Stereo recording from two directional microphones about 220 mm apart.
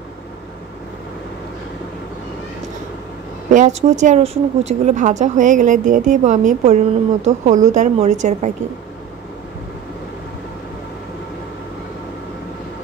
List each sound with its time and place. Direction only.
3.5 s speech: 35° right (ahead or behind)